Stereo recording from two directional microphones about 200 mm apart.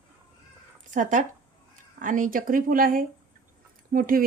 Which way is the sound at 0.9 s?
40° right (ahead or behind).